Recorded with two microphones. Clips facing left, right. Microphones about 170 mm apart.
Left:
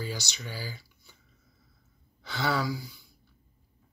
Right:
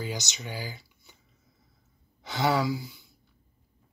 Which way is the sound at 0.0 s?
20° right (ahead or behind).